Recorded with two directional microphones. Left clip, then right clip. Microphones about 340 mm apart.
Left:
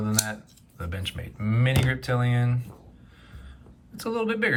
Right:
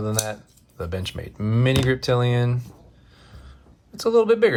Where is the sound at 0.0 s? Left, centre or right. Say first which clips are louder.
Right 2 dB; centre.